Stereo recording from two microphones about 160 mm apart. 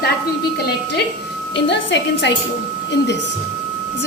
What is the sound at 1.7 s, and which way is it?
Speech, 90° left.